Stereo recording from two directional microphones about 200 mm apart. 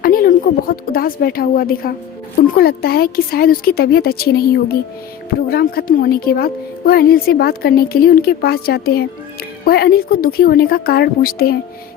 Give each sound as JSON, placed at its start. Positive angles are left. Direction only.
{"t": 0.0, "sound": "a woman's voice", "side_deg": 45}